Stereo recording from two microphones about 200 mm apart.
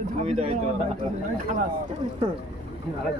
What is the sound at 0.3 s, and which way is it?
Speech, 35° right (ahead or behind).